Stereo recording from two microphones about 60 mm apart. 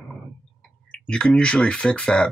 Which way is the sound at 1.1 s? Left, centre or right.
Centre.